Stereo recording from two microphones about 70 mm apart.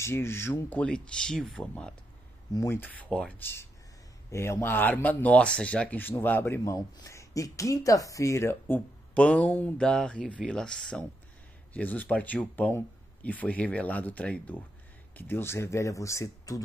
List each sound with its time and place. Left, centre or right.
0.0 s speech: left
0.7 s speech: centre
2.7 s speech: left
3.1 s speech: centre
3.3 s speech: left
4.7 s speech: left
7.1 s speech: left
9.1 s speech: centre
11.7 s speech: left
15.1 s speech: left